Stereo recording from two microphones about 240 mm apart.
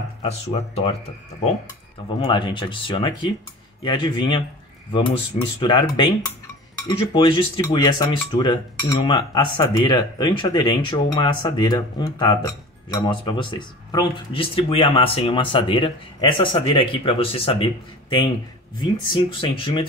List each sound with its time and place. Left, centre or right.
0.2 s speech: left
2.1 s speech: centre
5.6 s speech: left
18.8 s speech: left